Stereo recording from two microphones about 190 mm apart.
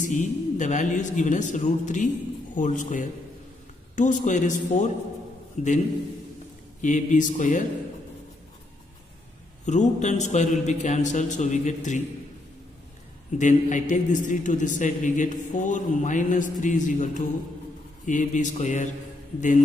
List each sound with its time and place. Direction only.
0.0 s a man's voice: 40° left (ahead or behind)
6.8 s a man's voice: 40° left (ahead or behind)
9.7 s a man's voice: 40° left (ahead or behind)
13.3 s a man's voice: 40° left (ahead or behind)